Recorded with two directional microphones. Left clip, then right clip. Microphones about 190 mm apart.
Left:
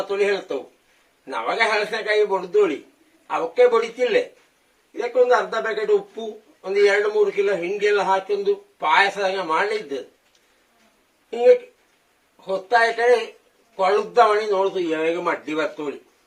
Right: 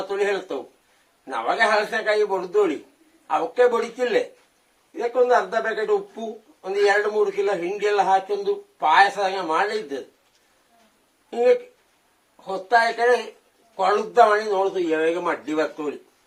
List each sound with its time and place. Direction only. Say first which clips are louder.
0.1 s speech: left 1 dB; centre (ahead or behind)
11.3 s speech: left 3 dB; centre (ahead or behind)